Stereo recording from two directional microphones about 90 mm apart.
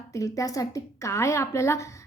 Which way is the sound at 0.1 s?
40° left (ahead or behind).